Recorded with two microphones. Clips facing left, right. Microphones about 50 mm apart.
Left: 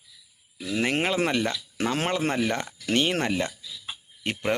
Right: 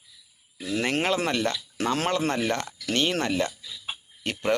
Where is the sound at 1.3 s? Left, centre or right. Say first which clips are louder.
Even; centre.